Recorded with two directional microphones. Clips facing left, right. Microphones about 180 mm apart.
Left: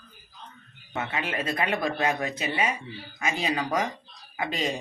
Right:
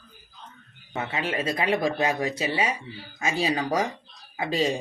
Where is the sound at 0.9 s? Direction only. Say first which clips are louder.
Right 2 dB; 25° right (ahead or behind).